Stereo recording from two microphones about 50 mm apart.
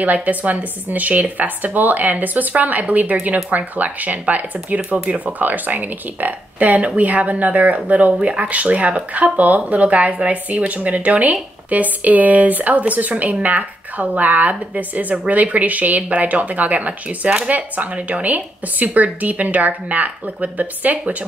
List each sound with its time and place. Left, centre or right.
0.0 s speech: right
5.4 s speech: right